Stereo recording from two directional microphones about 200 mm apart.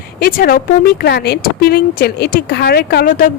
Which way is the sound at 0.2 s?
45° left (ahead or behind).